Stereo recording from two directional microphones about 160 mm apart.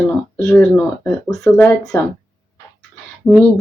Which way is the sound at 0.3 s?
20° left (ahead or behind).